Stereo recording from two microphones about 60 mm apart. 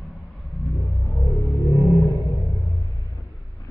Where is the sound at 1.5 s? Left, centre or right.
Left.